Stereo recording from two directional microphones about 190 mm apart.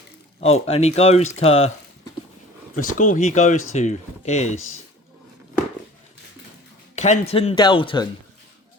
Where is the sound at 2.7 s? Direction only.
45° left (ahead or behind).